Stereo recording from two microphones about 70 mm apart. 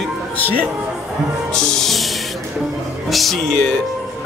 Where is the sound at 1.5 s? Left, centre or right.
Centre.